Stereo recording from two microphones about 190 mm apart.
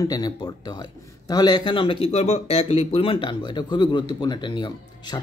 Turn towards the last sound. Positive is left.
turn(degrees=25)  # may be behind; listen again after turning